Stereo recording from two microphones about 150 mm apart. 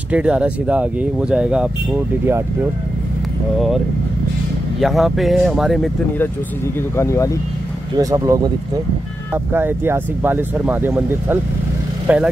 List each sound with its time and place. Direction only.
0.1 s speech: 5° right (ahead or behind)
3.5 s speech: centre (ahead or behind)
7.0 s speech: 20° left (ahead or behind)
8.0 s speech: 25° right (ahead or behind)